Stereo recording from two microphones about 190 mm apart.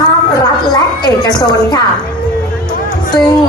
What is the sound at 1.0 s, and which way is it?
Speech, 20° left (ahead or behind).